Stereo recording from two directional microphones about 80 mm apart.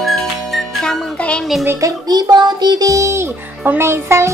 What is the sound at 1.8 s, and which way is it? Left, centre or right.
Music, right.